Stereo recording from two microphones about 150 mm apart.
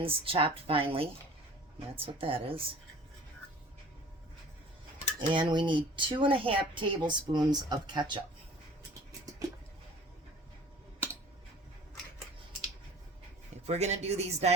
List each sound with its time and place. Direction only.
0.0 s speech: 40° right (ahead or behind)
5.3 s speech: 30° right (ahead or behind)
13.7 s speech: 45° right (ahead or behind)